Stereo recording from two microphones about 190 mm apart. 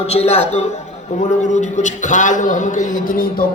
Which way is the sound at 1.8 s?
40° left (ahead or behind).